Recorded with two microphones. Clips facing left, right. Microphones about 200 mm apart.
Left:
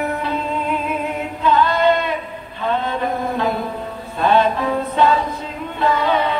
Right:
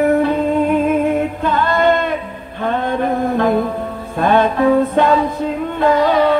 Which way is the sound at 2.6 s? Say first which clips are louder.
Right 3 dB; 50° right (ahead or behind).